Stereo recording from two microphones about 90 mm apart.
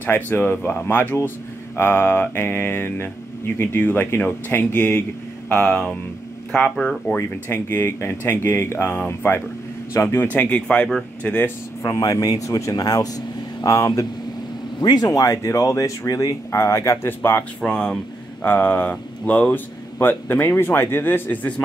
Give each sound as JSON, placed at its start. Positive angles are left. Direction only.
{"t": 0.0, "sound": "speech", "side_deg": 20}
{"t": 7.2, "sound": "speech", "side_deg": 25}
{"t": 9.9, "sound": "speech", "side_deg": 35}
{"t": 10.3, "sound": "speech", "side_deg": 15}
{"t": 11.8, "sound": "speech", "side_deg": 45}
{"t": 14.8, "sound": "speech", "side_deg": 50}
{"t": 16.5, "sound": "speech", "side_deg": 30}
{"t": 17.6, "sound": "speech", "side_deg": 10}
{"t": 20.0, "sound": "speech", "side_deg": 25}